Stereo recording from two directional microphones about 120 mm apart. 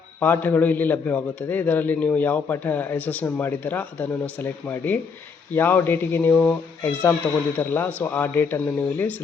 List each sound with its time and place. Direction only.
0.2 s a man's voice: 15° left (ahead or behind)